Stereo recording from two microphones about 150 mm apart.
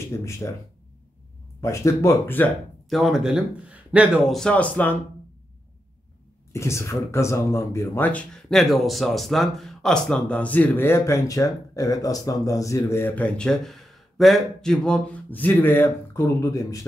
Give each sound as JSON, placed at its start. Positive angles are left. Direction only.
{"t": 0.1, "sound": "speech", "side_deg": 20}
{"t": 1.6, "sound": "speech", "side_deg": 20}
{"t": 2.9, "sound": "speech", "side_deg": 0}
{"t": 6.5, "sound": "speech", "side_deg": 20}